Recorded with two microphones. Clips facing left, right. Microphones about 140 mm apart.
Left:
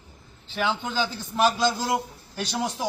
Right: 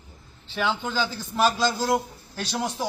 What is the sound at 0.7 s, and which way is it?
Speech, 5° left (ahead or behind).